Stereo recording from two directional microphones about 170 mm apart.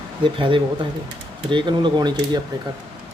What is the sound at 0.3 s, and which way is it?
Speech, 30° right (ahead or behind).